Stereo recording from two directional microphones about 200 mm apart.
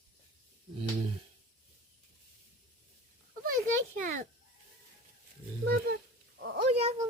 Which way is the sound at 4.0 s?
40° right (ahead or behind).